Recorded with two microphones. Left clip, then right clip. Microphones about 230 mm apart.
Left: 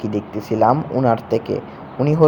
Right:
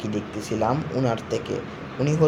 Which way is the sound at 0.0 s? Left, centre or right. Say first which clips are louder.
Left 5 dB; left.